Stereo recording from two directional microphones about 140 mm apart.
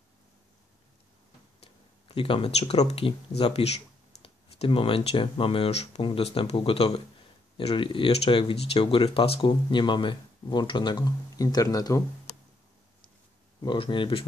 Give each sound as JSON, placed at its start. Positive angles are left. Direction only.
{"t": 2.1, "sound": "speech", "side_deg": 40}
{"t": 13.6, "sound": "speech", "side_deg": 35}